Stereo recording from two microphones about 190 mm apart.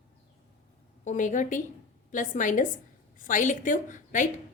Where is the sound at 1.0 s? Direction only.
40° left (ahead or behind).